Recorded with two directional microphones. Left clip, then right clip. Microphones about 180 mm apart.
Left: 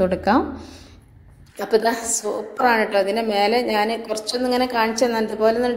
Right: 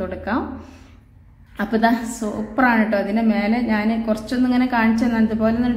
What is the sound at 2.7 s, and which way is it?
A woman's voice, 35° left (ahead or behind).